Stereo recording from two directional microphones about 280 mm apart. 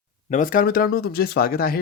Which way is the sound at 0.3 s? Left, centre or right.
Left.